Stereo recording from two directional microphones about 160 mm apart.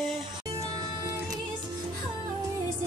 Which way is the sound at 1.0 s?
25° right (ahead or behind).